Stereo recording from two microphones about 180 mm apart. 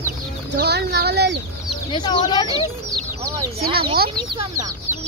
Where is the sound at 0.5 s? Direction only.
65° right (ahead or behind).